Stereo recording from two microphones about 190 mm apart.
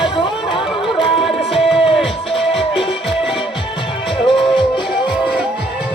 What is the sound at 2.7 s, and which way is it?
Music, 30° left (ahead or behind).